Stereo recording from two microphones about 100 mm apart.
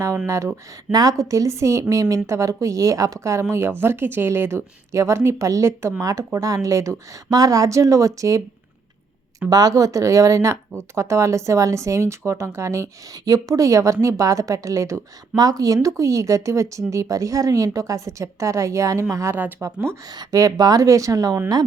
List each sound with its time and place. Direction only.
0.3 s speech: 30° right (ahead or behind)
9.5 s speech: 40° right (ahead or behind)